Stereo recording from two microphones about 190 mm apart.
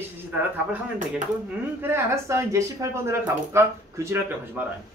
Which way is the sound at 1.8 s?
15° right (ahead or behind).